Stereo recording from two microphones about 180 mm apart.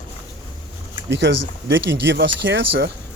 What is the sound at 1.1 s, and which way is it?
Speech, 75° right (ahead or behind).